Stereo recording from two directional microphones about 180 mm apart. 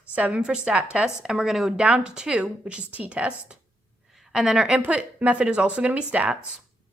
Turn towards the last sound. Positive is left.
turn(degrees=-5)  # may be behind; listen again after turning